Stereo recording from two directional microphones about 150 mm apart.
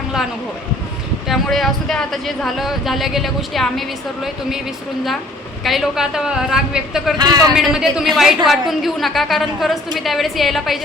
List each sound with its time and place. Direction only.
1.3 s speech: centre (ahead or behind)
5.6 s speech: centre (ahead or behind)